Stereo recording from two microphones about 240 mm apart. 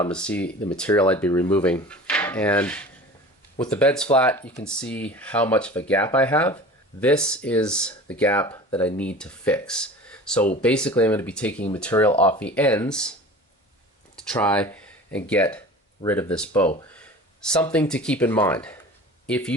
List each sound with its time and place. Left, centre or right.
0.0 s speech: centre
14.2 s speech: centre
16.9 s a sound: centre
17.7 s speech: centre